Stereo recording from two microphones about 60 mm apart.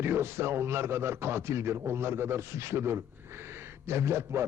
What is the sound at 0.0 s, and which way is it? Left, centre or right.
A man's voice, right.